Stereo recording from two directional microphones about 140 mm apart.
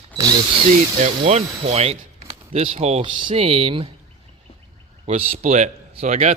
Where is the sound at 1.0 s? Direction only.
50° right (ahead or behind).